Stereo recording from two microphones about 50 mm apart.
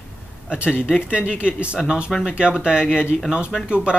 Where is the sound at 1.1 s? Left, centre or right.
Right.